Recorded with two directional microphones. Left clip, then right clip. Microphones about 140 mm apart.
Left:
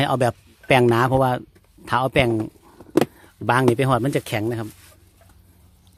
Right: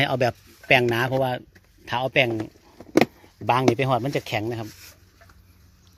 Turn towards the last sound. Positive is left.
turn(degrees=40)  # may be behind; listen again after turning